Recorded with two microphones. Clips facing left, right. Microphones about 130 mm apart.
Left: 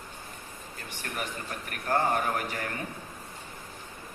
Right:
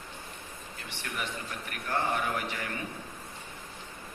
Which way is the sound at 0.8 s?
45° left (ahead or behind).